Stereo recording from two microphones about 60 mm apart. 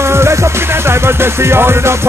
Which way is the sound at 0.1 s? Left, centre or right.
Right.